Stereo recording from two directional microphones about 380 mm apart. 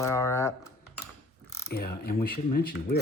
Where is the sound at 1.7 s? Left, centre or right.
Left.